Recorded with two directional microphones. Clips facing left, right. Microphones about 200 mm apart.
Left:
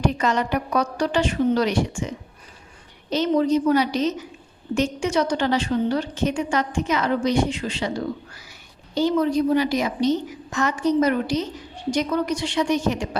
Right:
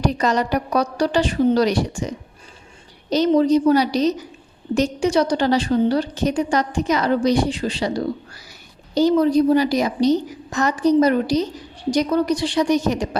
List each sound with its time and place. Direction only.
0.0 s a woman's voice: 35° right (ahead or behind)